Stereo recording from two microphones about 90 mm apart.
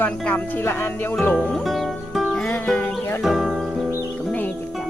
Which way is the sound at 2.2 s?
10° left (ahead or behind).